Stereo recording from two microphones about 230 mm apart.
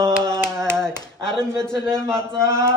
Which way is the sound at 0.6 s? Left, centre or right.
Centre.